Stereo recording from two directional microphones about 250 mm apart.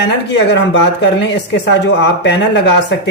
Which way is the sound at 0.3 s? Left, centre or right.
Left.